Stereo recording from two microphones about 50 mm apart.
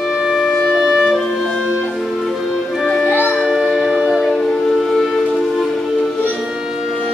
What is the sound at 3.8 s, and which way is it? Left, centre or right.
Music, right.